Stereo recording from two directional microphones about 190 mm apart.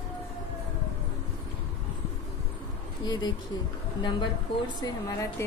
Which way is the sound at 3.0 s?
25° left (ahead or behind).